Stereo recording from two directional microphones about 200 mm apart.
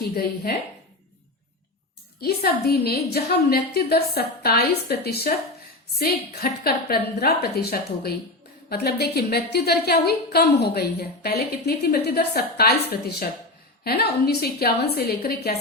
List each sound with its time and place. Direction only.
0.0 s a woman's voice: 50° left (ahead or behind)
2.2 s a woman's voice: 50° left (ahead or behind)